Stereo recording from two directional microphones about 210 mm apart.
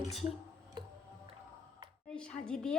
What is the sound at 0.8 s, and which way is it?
Music, 20° right (ahead or behind).